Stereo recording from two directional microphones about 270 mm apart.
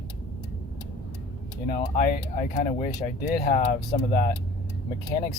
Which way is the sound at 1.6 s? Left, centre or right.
Left.